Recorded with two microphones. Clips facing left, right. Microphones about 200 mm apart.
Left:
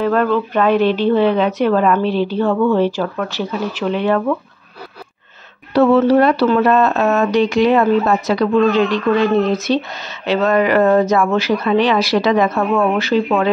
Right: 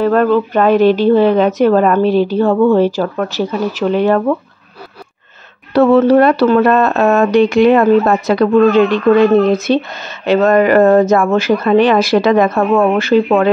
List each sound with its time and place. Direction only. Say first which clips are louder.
0.0 s a woman's voice: right 4 dB; 40° right (ahead or behind)
5.7 s a woman's voice: right 3 dB; 55° right (ahead or behind)